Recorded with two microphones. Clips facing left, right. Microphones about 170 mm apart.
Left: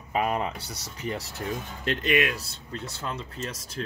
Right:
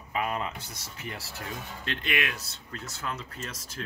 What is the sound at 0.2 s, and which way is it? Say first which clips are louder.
Speech: left 4 dB; 35° left (ahead or behind).